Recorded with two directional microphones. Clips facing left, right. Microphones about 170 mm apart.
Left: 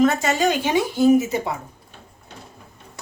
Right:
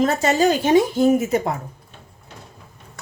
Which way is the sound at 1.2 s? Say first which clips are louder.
Right 2 dB; 50° right (ahead or behind).